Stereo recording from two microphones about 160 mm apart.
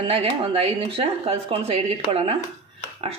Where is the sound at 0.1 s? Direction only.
40° right (ahead or behind).